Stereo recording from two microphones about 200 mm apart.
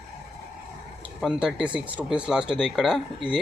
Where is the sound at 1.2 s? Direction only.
5° right (ahead or behind).